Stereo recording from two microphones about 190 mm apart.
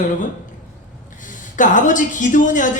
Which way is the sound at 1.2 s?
40° left (ahead or behind).